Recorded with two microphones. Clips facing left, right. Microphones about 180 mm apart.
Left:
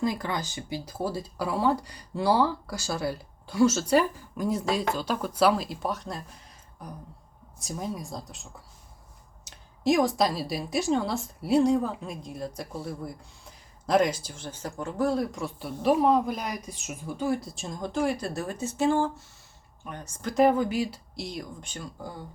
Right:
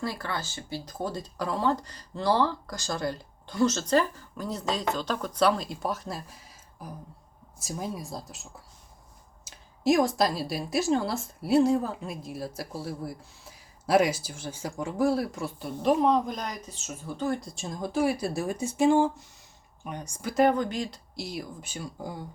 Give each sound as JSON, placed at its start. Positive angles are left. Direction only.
{"t": 0.0, "sound": "a woman's voice", "side_deg": 15}
{"t": 20.3, "sound": "a woman's voice", "side_deg": 5}